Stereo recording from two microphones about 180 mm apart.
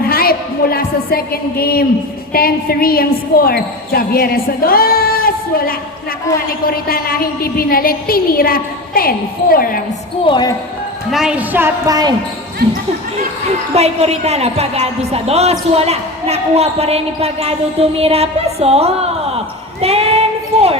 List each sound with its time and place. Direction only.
0.1 s a sound: 55° left (ahead or behind)
2.3 s a woman's voice: 55° left (ahead or behind)
10.2 s speech: 25° left (ahead or behind)
11.1 s a woman's voice: 5° right (ahead or behind); by 12.1 s 20° right (ahead or behind)
12.6 s speech: 60° right (ahead or behind)
13.7 s speech: 35° right (ahead or behind)